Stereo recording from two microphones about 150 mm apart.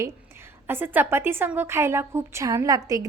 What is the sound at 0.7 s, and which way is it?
A woman's voice, 15° right (ahead or behind).